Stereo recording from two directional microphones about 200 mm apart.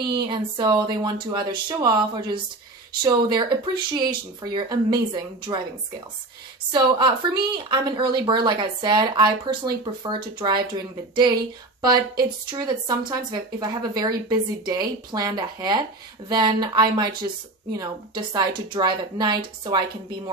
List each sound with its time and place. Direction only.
0.0 s a woman's voice: 25° right (ahead or behind)
6.7 s a woman's voice: 25° right (ahead or behind)